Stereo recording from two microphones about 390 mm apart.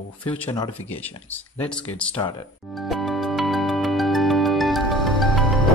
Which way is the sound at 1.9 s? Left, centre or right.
Centre.